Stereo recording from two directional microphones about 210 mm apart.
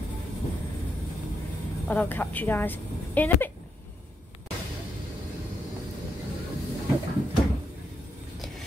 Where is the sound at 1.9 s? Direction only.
10° left (ahead or behind).